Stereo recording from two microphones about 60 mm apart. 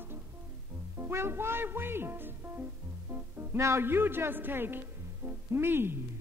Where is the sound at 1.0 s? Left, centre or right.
Right.